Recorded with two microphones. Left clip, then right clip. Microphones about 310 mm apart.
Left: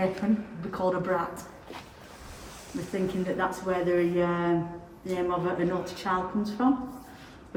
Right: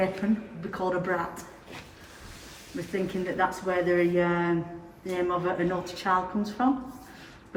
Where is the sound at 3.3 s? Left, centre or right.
Centre.